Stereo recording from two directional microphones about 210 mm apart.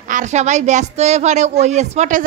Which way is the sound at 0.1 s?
35° right (ahead or behind).